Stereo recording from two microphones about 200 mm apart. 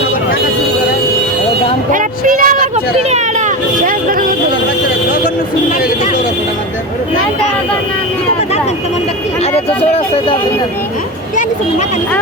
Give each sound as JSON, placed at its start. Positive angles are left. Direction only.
{"t": 1.9, "sound": "speech", "side_deg": -40}
{"t": 9.5, "sound": "speech", "side_deg": 30}